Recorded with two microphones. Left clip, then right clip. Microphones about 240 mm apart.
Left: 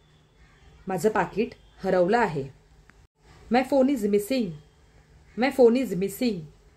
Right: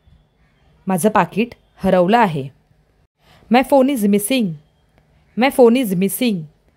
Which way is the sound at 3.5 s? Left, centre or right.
Right.